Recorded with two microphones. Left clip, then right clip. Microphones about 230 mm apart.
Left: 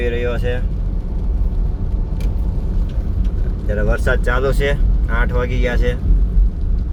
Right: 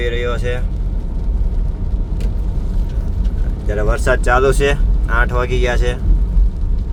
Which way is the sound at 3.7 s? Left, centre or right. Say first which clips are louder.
Right 2 dB; centre.